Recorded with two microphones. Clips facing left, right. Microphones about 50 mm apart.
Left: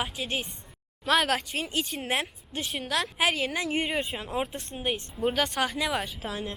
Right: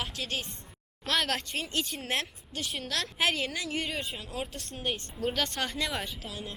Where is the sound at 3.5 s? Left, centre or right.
Left; by 6.1 s centre.